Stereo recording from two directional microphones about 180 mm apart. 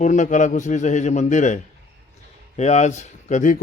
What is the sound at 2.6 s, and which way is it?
Speech, 40° left (ahead or behind).